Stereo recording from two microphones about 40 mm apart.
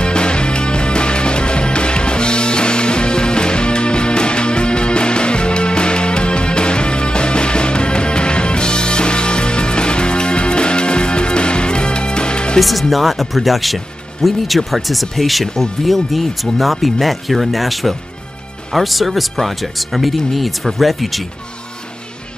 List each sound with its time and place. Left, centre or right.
0.0 s music: left
12.5 s speech: centre